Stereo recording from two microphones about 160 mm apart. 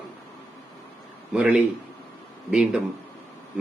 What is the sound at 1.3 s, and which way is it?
A man's voice, 5° right (ahead or behind).